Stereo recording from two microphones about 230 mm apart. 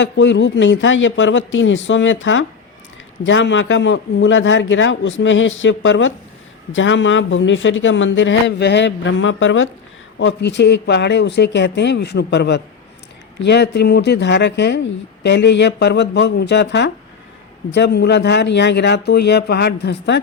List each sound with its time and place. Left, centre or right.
0.0 s a man's voice: left